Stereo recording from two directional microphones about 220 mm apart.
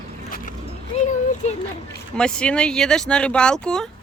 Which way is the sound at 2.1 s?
5° left (ahead or behind).